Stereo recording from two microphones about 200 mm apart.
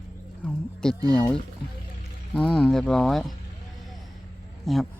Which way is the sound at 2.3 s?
5° left (ahead or behind).